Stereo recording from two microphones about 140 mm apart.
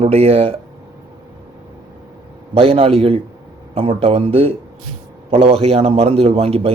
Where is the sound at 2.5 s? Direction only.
45° right (ahead or behind).